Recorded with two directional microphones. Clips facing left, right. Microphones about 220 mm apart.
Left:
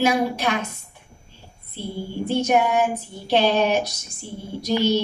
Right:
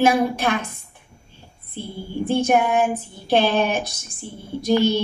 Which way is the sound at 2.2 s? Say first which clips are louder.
Right 1 dB; 50° right (ahead or behind).